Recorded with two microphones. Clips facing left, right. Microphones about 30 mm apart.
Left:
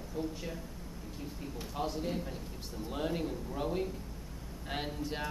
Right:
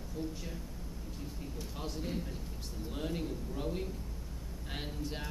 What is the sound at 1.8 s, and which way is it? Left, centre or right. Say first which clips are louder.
Speech: left 5 dB; centre.